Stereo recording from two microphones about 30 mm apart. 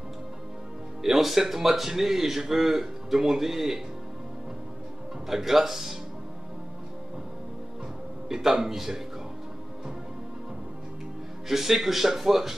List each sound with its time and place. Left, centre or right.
1.0 s a man's voice: centre
5.3 s a man's voice: centre
8.3 s a man's voice: centre
11.4 s a man's voice: centre